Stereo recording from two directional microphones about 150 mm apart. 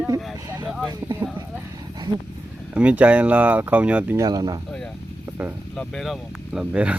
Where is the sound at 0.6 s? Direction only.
5° right (ahead or behind).